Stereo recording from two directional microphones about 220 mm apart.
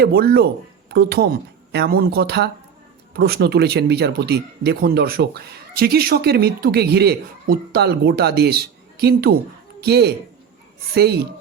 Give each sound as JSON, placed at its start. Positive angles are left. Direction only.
{"t": 0.0, "sound": "speech", "side_deg": -45}